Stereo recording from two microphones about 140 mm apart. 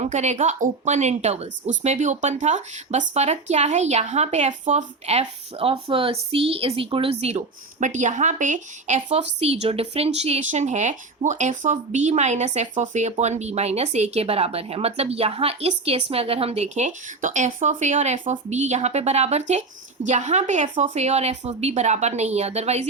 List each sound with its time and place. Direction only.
0.0 s a woman's voice: 55° right (ahead or behind)